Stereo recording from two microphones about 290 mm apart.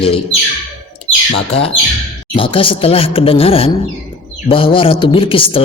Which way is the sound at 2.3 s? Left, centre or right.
Centre.